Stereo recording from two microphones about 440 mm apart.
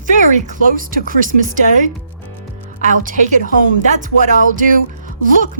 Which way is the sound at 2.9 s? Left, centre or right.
Centre.